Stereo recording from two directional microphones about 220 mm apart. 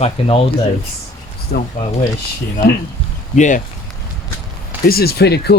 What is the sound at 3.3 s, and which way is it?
Speech, 35° left (ahead or behind).